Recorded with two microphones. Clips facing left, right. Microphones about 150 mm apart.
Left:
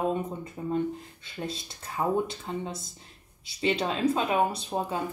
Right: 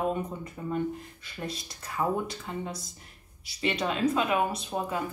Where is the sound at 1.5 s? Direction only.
25° left (ahead or behind).